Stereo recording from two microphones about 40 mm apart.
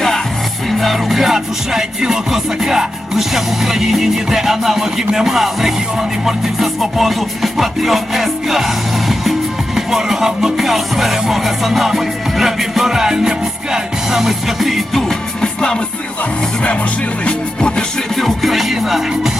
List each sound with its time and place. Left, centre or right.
0.7 s music: centre
15.4 s music: centre
17.2 s music: left
18.2 s music: centre
18.5 s music: centre